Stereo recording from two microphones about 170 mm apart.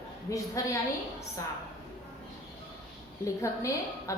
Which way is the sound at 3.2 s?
15° left (ahead or behind).